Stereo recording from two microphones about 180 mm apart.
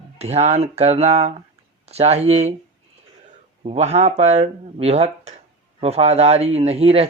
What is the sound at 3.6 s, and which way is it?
Speech, 35° right (ahead or behind).